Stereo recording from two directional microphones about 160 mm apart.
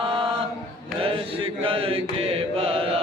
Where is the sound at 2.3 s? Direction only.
35° right (ahead or behind).